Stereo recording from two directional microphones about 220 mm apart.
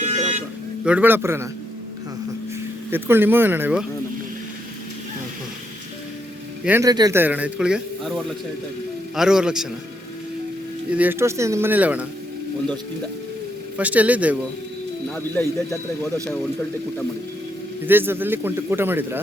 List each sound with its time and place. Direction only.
0.0 s music: 30° right (ahead or behind)
0.9 s a man's voice: 10° right (ahead or behind)
2.9 s a man's voice: 10° right (ahead or behind)
6.7 s a man's voice: 15° right (ahead or behind)
10.9 s a man's voice: 10° right (ahead or behind)
13.7 s a man's voice: 5° right (ahead or behind)
17.8 s a man's voice: 10° right (ahead or behind)